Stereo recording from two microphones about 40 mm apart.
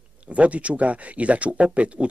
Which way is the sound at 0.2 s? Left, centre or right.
Right.